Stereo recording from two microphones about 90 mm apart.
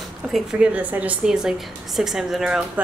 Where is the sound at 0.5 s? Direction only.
15° right (ahead or behind).